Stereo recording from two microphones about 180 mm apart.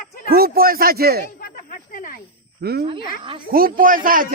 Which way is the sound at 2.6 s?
55° right (ahead or behind).